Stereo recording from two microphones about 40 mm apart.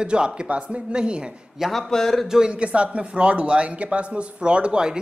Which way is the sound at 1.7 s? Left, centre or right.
Centre.